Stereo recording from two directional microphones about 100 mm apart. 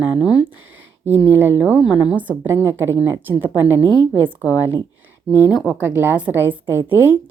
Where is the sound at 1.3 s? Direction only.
20° right (ahead or behind).